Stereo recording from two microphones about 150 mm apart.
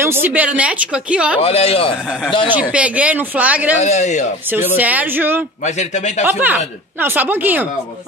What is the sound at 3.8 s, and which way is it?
Speech, 50° left (ahead or behind).